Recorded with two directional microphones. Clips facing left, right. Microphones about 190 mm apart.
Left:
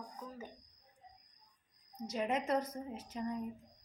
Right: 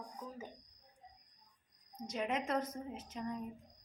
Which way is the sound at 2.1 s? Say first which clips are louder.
Left 2 dB; 5° left (ahead or behind).